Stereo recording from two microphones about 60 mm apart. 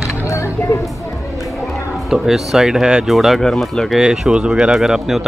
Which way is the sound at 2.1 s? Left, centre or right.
Centre.